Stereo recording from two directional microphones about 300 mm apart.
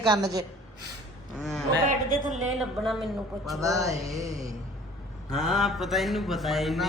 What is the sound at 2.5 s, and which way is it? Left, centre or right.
A man's voice, centre.